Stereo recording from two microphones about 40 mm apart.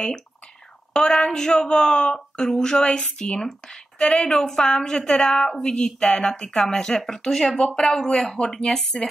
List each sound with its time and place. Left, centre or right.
1.2 s a woman's voice: centre
5.6 s a woman's voice: centre
7.5 s a woman's voice: left
8.4 s speech: left
8.6 s a woman's voice: centre